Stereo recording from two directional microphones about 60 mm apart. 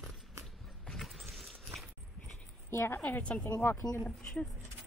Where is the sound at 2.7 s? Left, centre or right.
Left.